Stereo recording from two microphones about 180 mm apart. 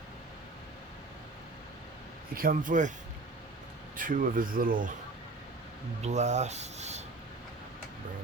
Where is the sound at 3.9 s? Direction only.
50° right (ahead or behind).